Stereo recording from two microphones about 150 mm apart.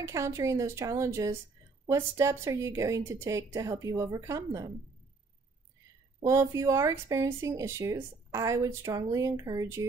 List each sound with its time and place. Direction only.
0.0 s speech: 20° right (ahead or behind)
6.2 s speech: 20° right (ahead or behind)